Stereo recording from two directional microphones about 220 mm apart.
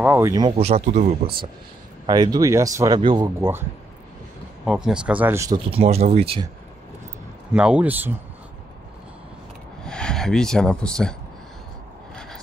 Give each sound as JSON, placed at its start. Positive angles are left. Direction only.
{"t": 0.0, "sound": "speech", "side_deg": -10}
{"t": 2.0, "sound": "speech", "side_deg": -20}
{"t": 3.3, "sound": "speech", "side_deg": -10}
{"t": 4.6, "sound": "speech", "side_deg": -5}
{"t": 5.7, "sound": "speech", "side_deg": -25}
{"t": 7.5, "sound": "speech", "side_deg": -5}
{"t": 9.8, "sound": "speech", "side_deg": 5}